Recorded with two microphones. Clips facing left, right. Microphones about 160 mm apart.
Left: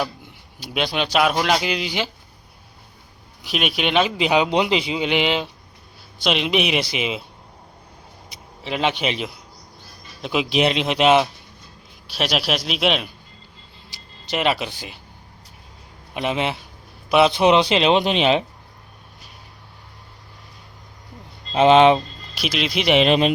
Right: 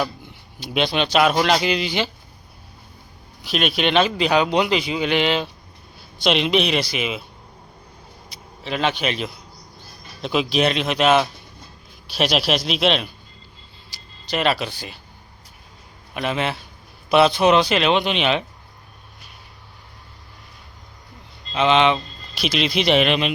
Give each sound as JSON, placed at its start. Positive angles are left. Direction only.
{"t": 0.6, "sound": "a man's voice", "side_deg": 5}
{"t": 3.5, "sound": "a man's voice", "side_deg": 10}
{"t": 8.3, "sound": "a man's voice", "side_deg": 20}
{"t": 10.5, "sound": "speech", "side_deg": 20}
{"t": 12.1, "sound": "a man's voice", "side_deg": 5}
{"t": 14.3, "sound": "a man's voice", "side_deg": 15}
{"t": 16.1, "sound": "a man's voice", "side_deg": 20}
{"t": 17.3, "sound": "speech", "side_deg": 25}
{"t": 21.5, "sound": "speech", "side_deg": 40}
{"t": 22.4, "sound": "a man's voice", "side_deg": 5}
{"t": 23.0, "sound": "speech", "side_deg": 35}